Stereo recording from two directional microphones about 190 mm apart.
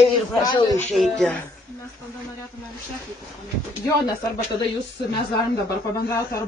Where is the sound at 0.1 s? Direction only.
20° left (ahead or behind).